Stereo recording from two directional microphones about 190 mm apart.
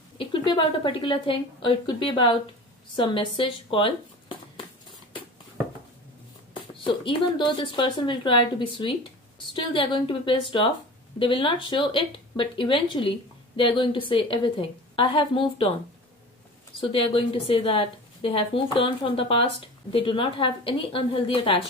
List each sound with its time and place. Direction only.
0.2 s a woman's voice: 25° left (ahead or behind)
6.7 s a woman's voice: 25° left (ahead or behind)
16.8 s a woman's voice: 30° left (ahead or behind)